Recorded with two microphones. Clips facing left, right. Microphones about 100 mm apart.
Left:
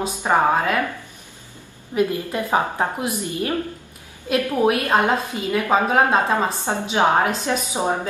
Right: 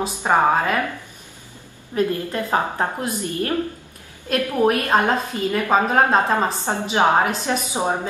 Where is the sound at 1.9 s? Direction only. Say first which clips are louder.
Even; 15° left (ahead or behind).